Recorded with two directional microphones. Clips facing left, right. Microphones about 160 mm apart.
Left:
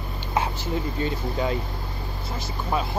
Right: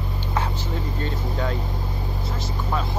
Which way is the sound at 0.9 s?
10° left (ahead or behind).